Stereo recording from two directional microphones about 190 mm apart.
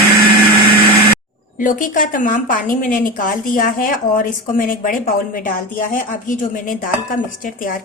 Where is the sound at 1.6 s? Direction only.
45° left (ahead or behind).